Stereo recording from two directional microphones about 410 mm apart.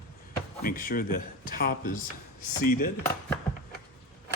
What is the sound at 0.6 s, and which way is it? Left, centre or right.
A man's voice, left.